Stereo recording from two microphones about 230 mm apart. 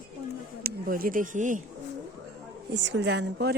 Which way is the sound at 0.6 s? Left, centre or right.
Right.